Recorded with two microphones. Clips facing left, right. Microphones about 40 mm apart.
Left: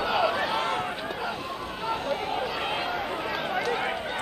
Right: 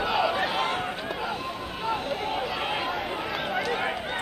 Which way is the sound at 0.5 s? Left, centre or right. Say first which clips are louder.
Even; right.